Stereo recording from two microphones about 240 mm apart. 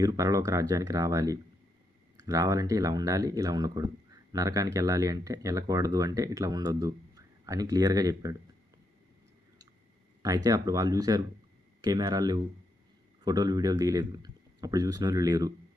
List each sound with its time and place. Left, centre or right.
0.0 s speech: centre
10.2 s speech: centre